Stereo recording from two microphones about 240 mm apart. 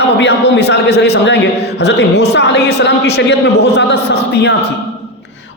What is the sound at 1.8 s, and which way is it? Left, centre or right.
A man's voice, left.